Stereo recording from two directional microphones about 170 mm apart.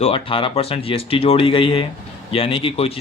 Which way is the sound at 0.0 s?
30° left (ahead or behind).